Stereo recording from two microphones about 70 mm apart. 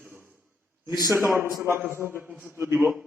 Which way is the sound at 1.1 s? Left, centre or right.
Right.